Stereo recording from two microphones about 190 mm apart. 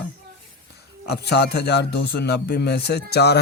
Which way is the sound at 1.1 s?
60° left (ahead or behind).